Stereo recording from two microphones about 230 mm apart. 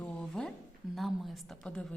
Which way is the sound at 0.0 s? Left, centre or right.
Centre.